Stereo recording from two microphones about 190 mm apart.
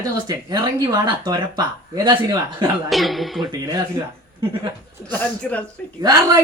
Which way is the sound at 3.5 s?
20° right (ahead or behind).